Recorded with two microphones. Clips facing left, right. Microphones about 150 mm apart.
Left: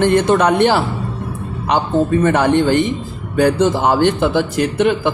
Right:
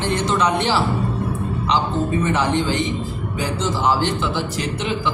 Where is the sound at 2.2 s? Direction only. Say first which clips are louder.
Left 7 dB; 60° left (ahead or behind).